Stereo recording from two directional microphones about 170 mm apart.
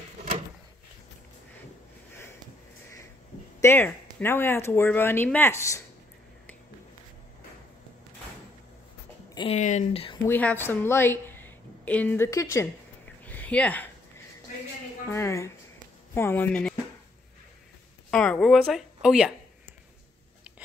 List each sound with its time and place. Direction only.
3.6 s speech: 10° left (ahead or behind)
9.5 s speech: 45° left (ahead or behind)
10.2 s a woman's voice: 10° left (ahead or behind)
15.0 s speech: 15° left (ahead or behind)
18.1 s speech: 5° left (ahead or behind)